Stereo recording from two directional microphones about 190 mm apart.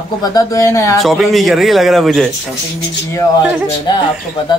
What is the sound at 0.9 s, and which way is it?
A man's voice, centre (ahead or behind).